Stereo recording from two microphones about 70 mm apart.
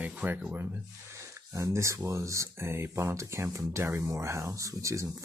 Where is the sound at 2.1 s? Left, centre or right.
Right.